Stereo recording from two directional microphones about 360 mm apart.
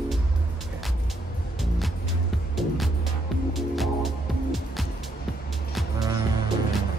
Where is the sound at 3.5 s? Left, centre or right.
Centre.